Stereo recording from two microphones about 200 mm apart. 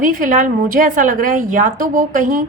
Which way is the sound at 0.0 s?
40° right (ahead or behind).